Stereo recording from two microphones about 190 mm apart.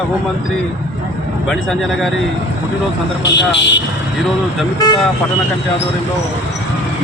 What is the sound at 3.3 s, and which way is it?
Speech, 70° left (ahead or behind).